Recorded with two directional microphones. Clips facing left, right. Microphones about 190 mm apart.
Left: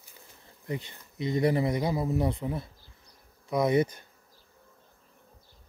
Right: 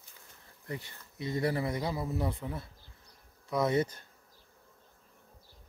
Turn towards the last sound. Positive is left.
turn(degrees=15)  # may be behind; listen again after turning